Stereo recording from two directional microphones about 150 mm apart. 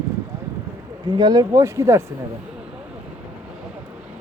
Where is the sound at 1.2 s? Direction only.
25° right (ahead or behind).